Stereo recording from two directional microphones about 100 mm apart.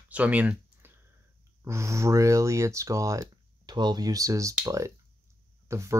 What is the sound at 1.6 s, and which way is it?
Speech, 30° right (ahead or behind).